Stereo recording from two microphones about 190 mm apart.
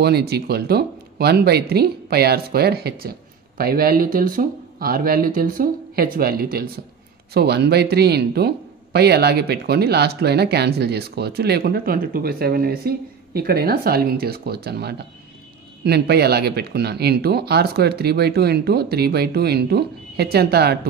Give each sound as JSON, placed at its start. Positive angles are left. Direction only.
{"t": 0.0, "sound": "speech", "side_deg": -55}